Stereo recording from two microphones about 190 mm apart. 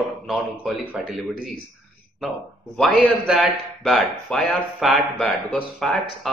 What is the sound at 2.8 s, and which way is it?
Speech, centre (ahead or behind).